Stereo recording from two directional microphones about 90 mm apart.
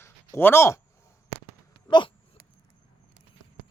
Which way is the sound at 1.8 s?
60° left (ahead or behind).